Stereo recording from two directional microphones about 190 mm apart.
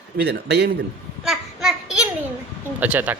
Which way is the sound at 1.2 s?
Centre (ahead or behind).